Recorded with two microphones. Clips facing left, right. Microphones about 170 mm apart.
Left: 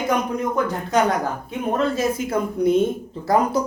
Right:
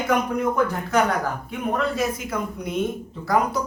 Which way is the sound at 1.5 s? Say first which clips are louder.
Left 5 dB; 25° left (ahead or behind).